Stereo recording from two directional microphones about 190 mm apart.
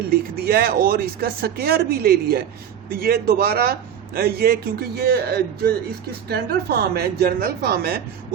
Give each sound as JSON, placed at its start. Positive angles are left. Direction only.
{"t": 0.1, "sound": "a man's voice", "side_deg": -55}